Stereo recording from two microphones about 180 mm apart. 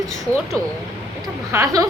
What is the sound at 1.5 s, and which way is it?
Speech, 20° right (ahead or behind).